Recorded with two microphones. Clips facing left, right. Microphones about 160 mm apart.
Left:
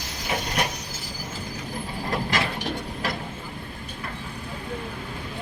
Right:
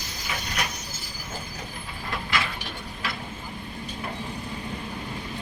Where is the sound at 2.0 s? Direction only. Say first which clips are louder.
Left 3 dB; 40° left (ahead or behind).